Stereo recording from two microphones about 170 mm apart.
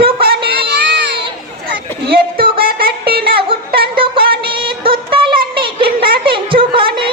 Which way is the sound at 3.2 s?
30° right (ahead or behind).